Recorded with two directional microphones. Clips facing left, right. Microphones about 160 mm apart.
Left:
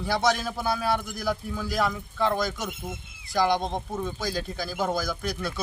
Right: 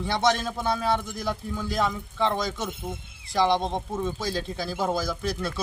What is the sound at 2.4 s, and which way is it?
Speech, 25° right (ahead or behind).